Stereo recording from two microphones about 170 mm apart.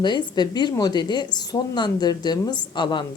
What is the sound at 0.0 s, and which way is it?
A woman's voice, 25° left (ahead or behind).